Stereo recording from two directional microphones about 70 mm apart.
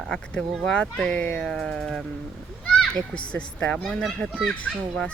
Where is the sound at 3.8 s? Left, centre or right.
Centre.